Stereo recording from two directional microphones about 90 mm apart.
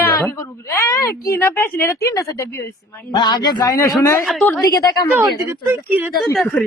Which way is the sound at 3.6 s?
35° left (ahead or behind).